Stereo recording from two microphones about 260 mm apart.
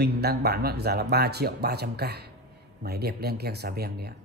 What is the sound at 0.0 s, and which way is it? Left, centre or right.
A man's voice, right.